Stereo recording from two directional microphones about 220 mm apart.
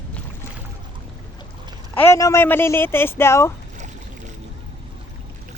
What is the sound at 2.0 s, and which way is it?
Speech, 10° left (ahead or behind).